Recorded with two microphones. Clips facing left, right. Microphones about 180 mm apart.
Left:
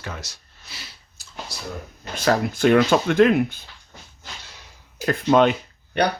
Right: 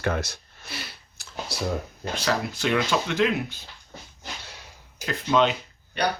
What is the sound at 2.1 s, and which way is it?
Speech, 50° left (ahead or behind).